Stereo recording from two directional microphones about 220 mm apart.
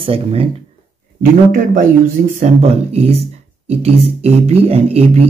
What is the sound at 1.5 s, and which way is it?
A man's voice, 40° right (ahead or behind).